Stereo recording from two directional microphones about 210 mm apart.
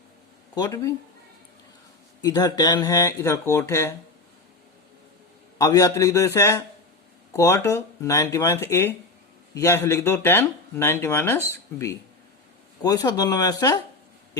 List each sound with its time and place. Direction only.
0.5 s speech: 15° left (ahead or behind)
2.2 s speech: 20° left (ahead or behind)
5.5 s speech: 15° left (ahead or behind)
12.8 s speech: 20° left (ahead or behind)